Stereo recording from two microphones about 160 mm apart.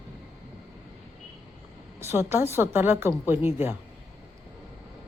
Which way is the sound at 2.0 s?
15° right (ahead or behind).